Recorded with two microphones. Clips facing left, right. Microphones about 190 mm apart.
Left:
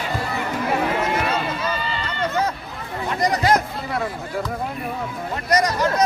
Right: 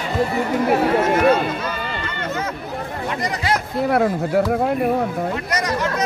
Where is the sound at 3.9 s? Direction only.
60° right (ahead or behind).